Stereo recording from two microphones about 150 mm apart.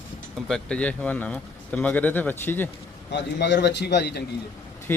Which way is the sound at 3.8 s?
90° left.